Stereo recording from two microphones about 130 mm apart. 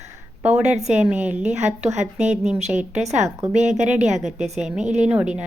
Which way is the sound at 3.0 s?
60° right (ahead or behind).